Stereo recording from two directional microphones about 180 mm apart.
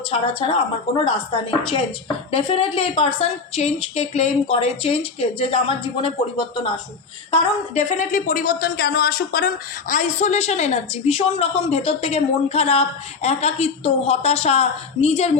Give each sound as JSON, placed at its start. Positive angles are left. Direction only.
{"t": 0.1, "sound": "a woman's voice", "side_deg": 30}